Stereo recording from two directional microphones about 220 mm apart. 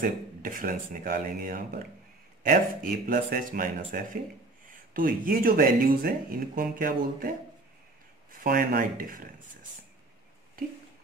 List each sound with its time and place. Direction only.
0.0 s speech: 40° right (ahead or behind)